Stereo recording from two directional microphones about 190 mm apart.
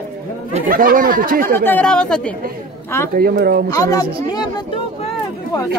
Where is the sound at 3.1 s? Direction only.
55° right (ahead or behind).